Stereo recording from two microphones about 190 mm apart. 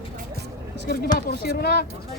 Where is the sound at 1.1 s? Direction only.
50° left (ahead or behind).